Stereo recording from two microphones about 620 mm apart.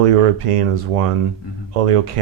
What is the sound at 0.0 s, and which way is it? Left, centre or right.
Speech, right.